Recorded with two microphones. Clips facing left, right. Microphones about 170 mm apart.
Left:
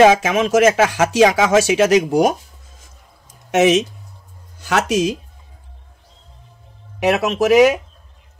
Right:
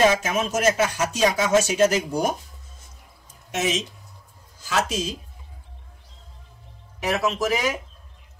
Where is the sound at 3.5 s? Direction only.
75° left (ahead or behind).